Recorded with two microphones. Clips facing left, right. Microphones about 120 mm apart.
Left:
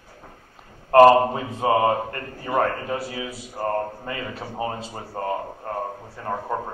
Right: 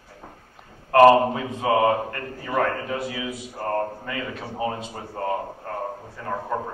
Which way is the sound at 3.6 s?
25° left (ahead or behind).